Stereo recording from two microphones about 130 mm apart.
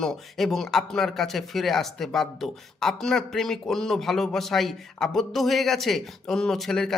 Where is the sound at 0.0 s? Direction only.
5° left (ahead or behind).